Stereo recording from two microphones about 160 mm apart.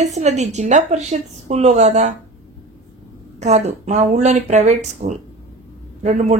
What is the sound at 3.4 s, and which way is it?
Speech, 45° right (ahead or behind).